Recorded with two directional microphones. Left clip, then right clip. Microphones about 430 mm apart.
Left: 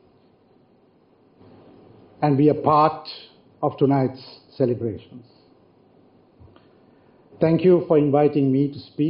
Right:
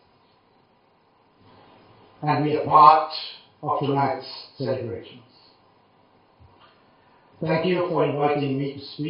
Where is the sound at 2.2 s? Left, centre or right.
Centre.